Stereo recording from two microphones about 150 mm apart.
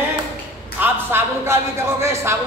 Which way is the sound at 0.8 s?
15° right (ahead or behind).